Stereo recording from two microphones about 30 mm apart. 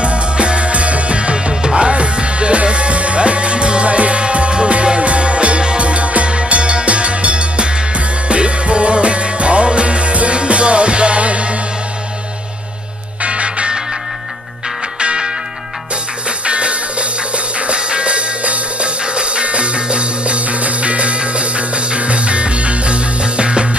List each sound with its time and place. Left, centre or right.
0.0 s music: right
1.5 s music: right
13.2 s music: right
16.3 s music: right